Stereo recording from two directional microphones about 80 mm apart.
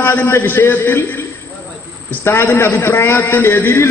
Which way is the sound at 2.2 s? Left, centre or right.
Left.